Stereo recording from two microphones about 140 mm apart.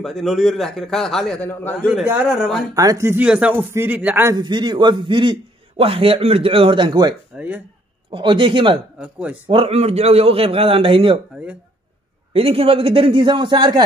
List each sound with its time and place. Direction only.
0.0 s a man's voice: centre (ahead or behind)
1.5 s a man's voice: 15° left (ahead or behind)
2.2 s a man's voice: 5° left (ahead or behind)
2.7 s speech: 25° right (ahead or behind)
3.3 s speech: 10° right (ahead or behind)
4.4 s a man's voice: 35° right (ahead or behind)
7.3 s speech: 10° right (ahead or behind)
8.1 s a man's voice: 35° right (ahead or behind)
9.0 s speech: 10° right (ahead or behind)
9.5 s a man's voice: 45° right (ahead or behind)
12.3 s a man's voice: 40° right (ahead or behind)